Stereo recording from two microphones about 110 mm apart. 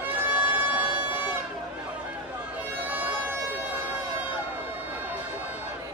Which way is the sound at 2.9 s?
15° right (ahead or behind).